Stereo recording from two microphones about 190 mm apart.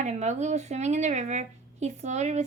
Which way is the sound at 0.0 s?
40° right (ahead or behind).